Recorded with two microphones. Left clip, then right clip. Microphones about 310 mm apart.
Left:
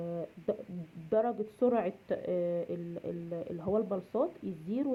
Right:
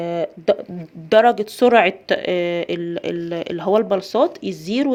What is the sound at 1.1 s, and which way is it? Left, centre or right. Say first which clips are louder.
Speech: right 17 dB; right.